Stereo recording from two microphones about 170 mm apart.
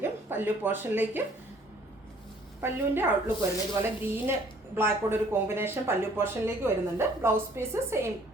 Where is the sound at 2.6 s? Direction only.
15° right (ahead or behind).